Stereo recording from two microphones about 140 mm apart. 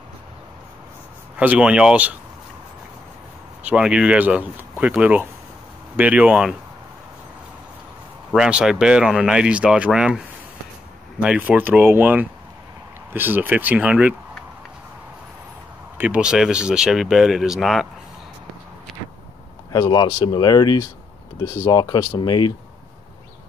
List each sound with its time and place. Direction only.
1.4 s speech: 10° right (ahead or behind)
3.6 s speech: 5° right (ahead or behind)
8.4 s speech: 5° right (ahead or behind)
16.0 s speech: 10° right (ahead or behind)
18.9 s vehicle: centre (ahead or behind)
19.7 s speech: 30° left (ahead or behind)